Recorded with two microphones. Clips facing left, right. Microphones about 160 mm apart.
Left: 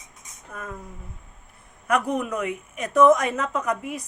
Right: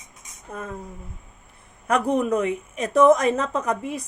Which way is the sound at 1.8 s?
30° right (ahead or behind).